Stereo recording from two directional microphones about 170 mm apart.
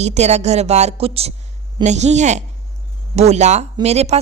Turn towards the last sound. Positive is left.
turn(degrees=-40)  # may be behind; listen again after turning